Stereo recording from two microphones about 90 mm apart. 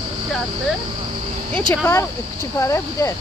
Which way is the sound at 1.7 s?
30° left (ahead or behind).